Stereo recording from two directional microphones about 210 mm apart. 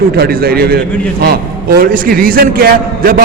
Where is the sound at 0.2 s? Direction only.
45° right (ahead or behind).